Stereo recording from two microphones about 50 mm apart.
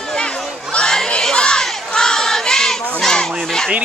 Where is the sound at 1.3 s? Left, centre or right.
Centre.